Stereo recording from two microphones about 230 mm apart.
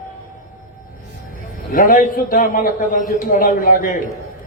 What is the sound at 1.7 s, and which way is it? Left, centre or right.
A man's voice, left.